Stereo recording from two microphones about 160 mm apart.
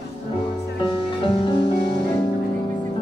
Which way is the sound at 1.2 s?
35° left (ahead or behind).